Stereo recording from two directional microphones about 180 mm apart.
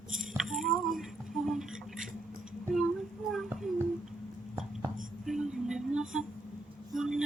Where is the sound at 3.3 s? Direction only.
Centre (ahead or behind).